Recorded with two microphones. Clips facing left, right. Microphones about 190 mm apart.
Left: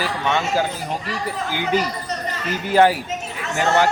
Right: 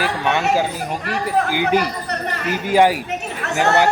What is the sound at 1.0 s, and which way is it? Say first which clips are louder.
Speech: right 6 dB; 65° right (ahead or behind).